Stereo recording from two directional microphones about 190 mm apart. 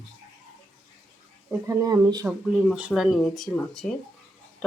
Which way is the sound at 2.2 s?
5° right (ahead or behind).